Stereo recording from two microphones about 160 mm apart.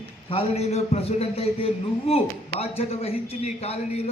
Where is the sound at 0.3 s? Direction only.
40° left (ahead or behind).